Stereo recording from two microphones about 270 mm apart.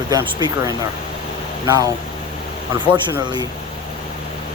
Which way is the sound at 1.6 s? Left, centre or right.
Centre.